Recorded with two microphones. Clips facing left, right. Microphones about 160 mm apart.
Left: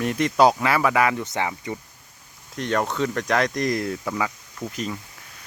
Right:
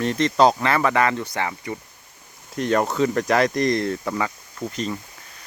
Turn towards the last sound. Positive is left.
turn(degrees=0)  # may be behind; listen again after turning